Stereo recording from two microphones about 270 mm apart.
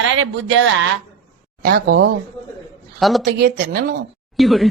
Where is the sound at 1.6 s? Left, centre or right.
Right.